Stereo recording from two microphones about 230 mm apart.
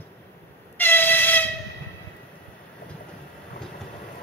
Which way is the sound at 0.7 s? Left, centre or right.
Centre.